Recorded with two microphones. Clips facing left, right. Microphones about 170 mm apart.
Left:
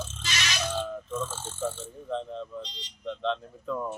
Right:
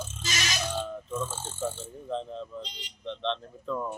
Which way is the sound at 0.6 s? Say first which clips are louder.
Left 1 dB; 10° right (ahead or behind).